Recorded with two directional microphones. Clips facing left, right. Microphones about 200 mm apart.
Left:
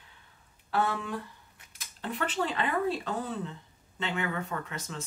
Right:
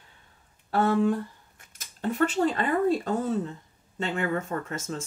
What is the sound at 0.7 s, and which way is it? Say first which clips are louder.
Speech: right 8 dB; 45° right (ahead or behind).